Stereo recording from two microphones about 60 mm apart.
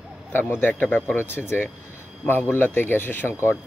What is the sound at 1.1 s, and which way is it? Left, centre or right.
Speech, left.